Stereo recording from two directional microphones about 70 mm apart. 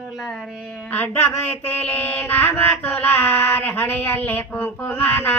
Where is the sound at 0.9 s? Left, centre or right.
Left.